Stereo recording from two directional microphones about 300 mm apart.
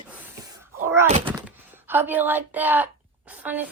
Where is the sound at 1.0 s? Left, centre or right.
Right.